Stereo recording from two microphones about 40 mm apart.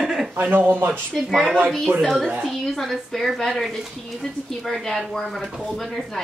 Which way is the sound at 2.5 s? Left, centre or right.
Centre.